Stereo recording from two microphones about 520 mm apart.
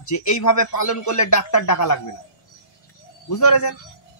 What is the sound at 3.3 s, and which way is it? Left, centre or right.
Speech, left.